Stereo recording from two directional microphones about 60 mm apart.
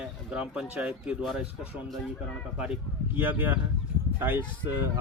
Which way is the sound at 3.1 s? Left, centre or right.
Right.